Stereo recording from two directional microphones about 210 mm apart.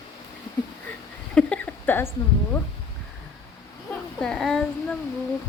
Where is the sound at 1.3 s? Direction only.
5° left (ahead or behind).